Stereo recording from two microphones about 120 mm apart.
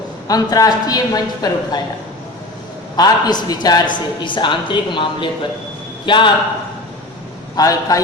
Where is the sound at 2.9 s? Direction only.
35° left (ahead or behind).